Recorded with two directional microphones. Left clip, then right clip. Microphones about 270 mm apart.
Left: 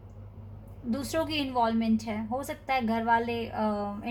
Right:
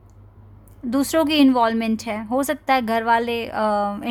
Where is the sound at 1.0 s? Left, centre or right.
Right.